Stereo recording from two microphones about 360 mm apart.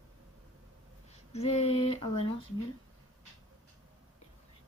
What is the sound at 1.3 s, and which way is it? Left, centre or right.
Speech, centre.